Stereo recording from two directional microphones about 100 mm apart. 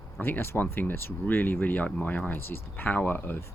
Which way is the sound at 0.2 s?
20° left (ahead or behind).